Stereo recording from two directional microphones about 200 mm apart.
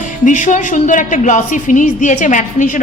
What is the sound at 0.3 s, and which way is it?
A woman's voice, 40° left (ahead or behind).